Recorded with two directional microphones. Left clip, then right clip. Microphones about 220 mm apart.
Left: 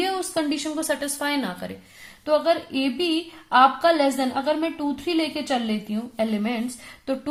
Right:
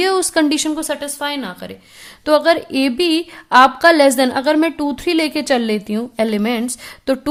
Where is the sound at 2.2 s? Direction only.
45° right (ahead or behind).